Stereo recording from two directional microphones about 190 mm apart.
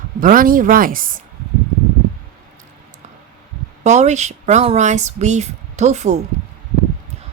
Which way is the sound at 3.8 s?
40° right (ahead or behind).